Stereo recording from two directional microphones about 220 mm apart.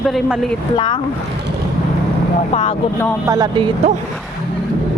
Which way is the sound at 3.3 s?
20° right (ahead or behind).